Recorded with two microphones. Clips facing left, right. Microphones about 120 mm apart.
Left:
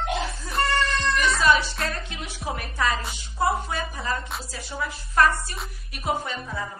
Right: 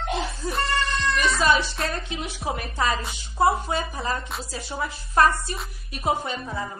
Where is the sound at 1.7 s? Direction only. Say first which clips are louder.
Right 2 dB; 30° right (ahead or behind).